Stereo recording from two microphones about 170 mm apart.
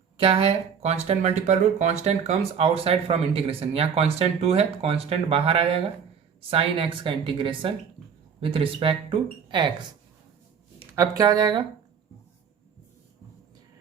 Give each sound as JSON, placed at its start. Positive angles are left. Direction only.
{"t": 0.2, "sound": "speech", "side_deg": -35}
{"t": 10.9, "sound": "speech", "side_deg": -20}